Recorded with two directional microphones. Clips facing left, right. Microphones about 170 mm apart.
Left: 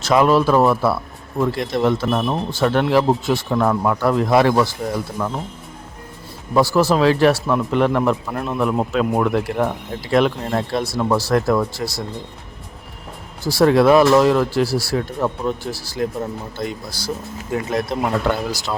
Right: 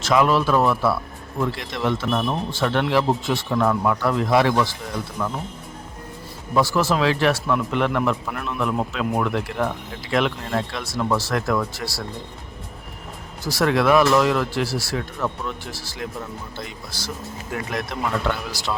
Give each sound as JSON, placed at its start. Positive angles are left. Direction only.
{"t": 0.0, "sound": "speech", "side_deg": 40}
{"t": 6.5, "sound": "speech", "side_deg": 35}
{"t": 11.8, "sound": "speech", "side_deg": 25}
{"t": 13.4, "sound": "speech", "side_deg": 30}